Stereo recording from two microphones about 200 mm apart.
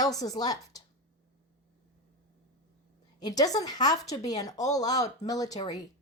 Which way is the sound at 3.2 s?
20° left (ahead or behind).